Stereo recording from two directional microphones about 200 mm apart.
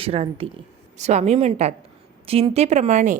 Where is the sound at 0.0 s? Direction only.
30° right (ahead or behind).